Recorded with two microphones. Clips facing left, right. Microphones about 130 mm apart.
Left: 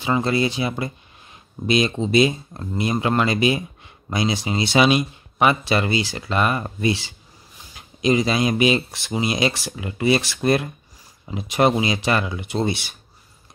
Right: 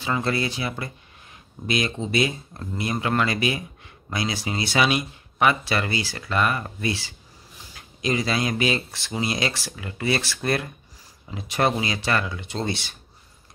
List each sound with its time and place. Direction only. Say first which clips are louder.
0.0 s speech: left 5 dB; 20° left (ahead or behind)